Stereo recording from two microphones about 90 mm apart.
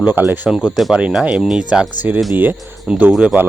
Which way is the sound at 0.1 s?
20° right (ahead or behind).